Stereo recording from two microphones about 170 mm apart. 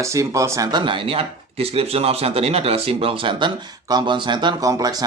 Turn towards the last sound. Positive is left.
turn(degrees=-20)  # may be behind; listen again after turning